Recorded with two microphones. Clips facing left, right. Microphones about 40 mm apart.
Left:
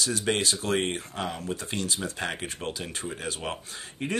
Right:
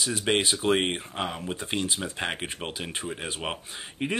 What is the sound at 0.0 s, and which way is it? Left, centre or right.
Speech, centre.